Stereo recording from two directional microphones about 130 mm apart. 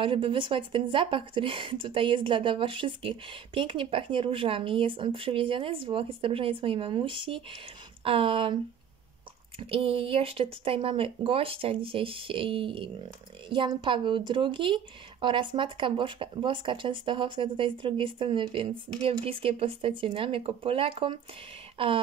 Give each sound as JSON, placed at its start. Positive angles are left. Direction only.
{"t": 0.0, "sound": "speech", "side_deg": -40}
{"t": 9.6, "sound": "speech", "side_deg": -45}